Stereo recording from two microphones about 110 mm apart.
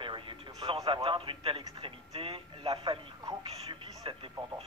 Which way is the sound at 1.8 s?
55° right (ahead or behind).